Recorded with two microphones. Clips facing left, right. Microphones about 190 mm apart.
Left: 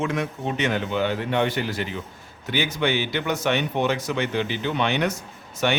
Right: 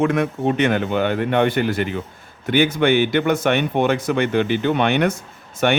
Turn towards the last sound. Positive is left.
turn(degrees=-55)  # may be behind; listen again after turning